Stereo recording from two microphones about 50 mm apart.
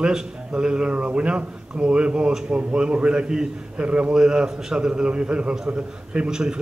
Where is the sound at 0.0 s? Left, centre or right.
Centre.